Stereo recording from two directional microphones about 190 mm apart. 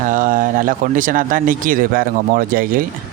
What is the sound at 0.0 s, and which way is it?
Speech, 45° right (ahead or behind).